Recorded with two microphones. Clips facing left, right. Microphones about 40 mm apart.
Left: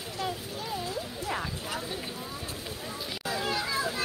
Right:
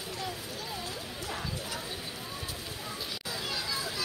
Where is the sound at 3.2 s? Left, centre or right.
Left.